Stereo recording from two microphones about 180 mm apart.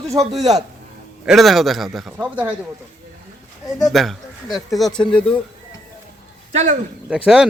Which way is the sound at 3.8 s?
Centre (ahead or behind).